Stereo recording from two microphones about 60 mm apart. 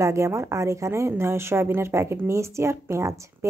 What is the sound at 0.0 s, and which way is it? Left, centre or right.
A woman's voice, right.